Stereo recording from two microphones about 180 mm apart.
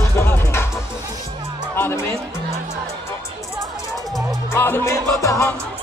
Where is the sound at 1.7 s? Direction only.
15° left (ahead or behind).